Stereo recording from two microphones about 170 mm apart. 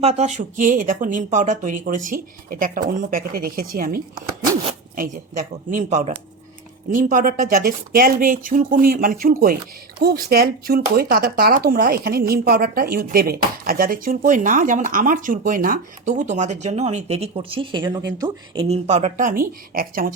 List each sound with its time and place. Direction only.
0.0 s speech: 40° right (ahead or behind); by 18.6 s 25° right (ahead or behind)
18.6 s speech: 40° right (ahead or behind); by 20.1 s 60° right (ahead or behind)